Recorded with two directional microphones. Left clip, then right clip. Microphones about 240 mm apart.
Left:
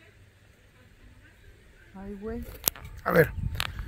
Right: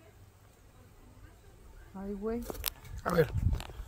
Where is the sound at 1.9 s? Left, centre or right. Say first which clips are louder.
Right 1 dB; right.